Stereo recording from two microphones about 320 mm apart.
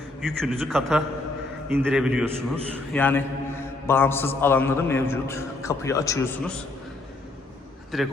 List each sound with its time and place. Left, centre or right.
0.2 s a man's voice: centre
7.9 s a man's voice: centre